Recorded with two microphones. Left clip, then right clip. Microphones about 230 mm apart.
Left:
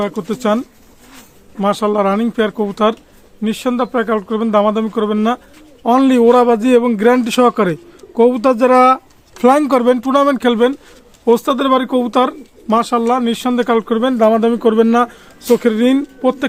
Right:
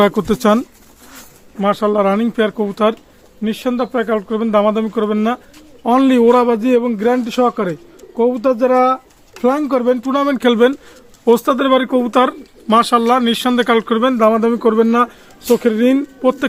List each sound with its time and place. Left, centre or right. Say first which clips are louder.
0.0 s speech: right 5 dB; right
1.5 s a man's voice: even; centre
10.3 s speech: right 1 dB; centre